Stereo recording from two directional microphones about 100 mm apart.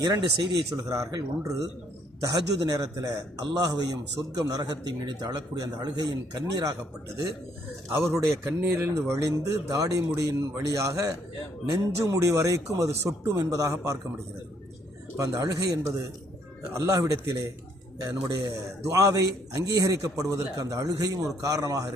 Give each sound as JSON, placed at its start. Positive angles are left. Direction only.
{"t": 0.0, "sound": "a man's voice", "side_deg": -40}
{"t": 7.9, "sound": "a man's voice", "side_deg": -30}
{"t": 15.2, "sound": "a man's voice", "side_deg": -35}